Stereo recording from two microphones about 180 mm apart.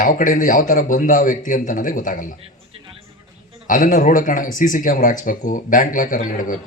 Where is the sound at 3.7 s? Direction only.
45° left (ahead or behind).